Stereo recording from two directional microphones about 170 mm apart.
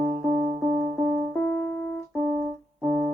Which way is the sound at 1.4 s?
10° left (ahead or behind).